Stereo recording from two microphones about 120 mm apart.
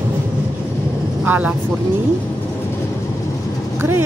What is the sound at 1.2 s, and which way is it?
Speech, 15° right (ahead or behind).